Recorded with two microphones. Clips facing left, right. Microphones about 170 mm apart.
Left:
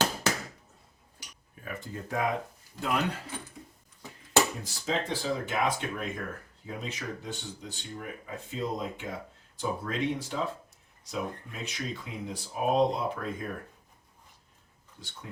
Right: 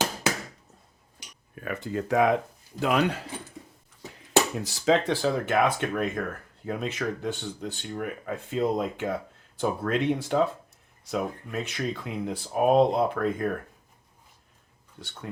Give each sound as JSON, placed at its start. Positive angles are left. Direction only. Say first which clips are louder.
{"t": 0.0, "sound": "chop", "louder": "right 1 dB", "side_deg": -10}
{"t": 1.5, "sound": "speech", "louder": "right 8 dB", "side_deg": -75}
{"t": 4.6, "sound": "speech", "louder": "right 9 dB", "side_deg": -75}
{"t": 8.4, "sound": "speech", "louder": "right 7 dB", "side_deg": -75}
{"t": 9.6, "sound": "speech", "louder": "right 5 dB", "side_deg": -65}